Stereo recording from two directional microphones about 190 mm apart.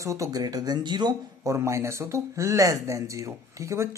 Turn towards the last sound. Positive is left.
turn(degrees=-15)  # may be behind; listen again after turning